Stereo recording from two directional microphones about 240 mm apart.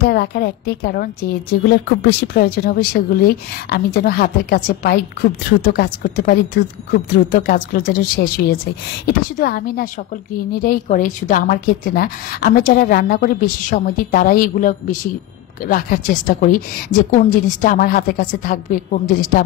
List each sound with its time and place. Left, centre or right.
0.0 s a woman's voice: left